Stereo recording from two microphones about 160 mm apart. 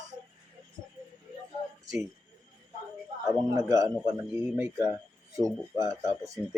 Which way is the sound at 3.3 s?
20° right (ahead or behind).